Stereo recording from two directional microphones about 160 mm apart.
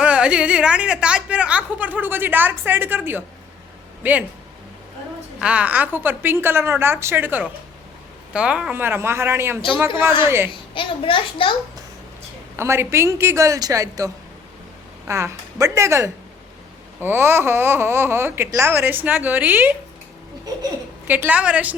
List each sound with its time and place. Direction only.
0.0 s a woman's voice: 5° right (ahead or behind)
5.4 s a woman's voice: 5° right (ahead or behind)
10.5 s a child's voice: 35° left (ahead or behind)
12.5 s a woman's voice: 15° right (ahead or behind)
21.1 s a woman's voice: 10° right (ahead or behind)